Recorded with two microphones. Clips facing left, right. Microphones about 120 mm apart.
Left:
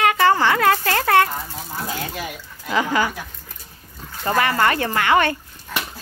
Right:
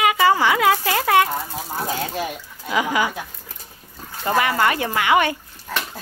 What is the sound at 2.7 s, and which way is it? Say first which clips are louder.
Speech: left 1 dB; 10° right (ahead or behind).